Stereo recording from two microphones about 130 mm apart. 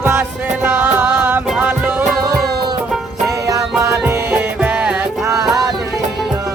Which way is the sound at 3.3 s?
25° right (ahead or behind).